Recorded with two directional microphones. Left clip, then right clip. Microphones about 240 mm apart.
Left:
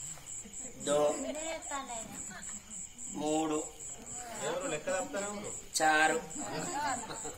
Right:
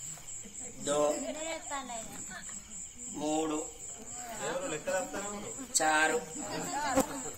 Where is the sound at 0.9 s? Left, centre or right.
Centre.